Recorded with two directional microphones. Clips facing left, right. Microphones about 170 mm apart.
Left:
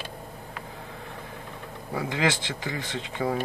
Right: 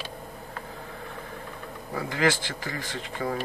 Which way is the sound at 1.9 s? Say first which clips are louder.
Right 1 dB; 20° left (ahead or behind).